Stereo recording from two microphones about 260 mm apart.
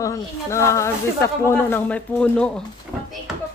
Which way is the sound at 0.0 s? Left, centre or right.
Centre.